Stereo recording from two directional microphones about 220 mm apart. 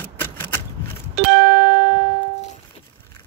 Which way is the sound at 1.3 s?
70° right (ahead or behind).